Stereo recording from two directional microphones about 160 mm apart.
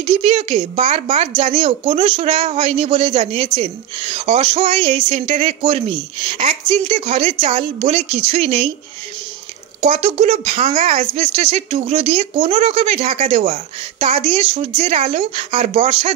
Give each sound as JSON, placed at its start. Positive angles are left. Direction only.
{"t": 0.0, "sound": "speech", "side_deg": -40}
{"t": 9.8, "sound": "speech", "side_deg": -45}